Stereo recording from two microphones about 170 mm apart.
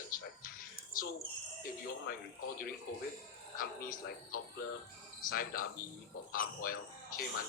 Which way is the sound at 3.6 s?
55° left (ahead or behind).